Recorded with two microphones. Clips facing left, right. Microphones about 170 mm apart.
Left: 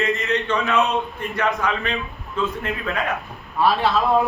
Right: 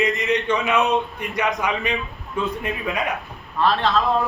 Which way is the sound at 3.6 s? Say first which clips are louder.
Left 1 dB; 10° left (ahead or behind).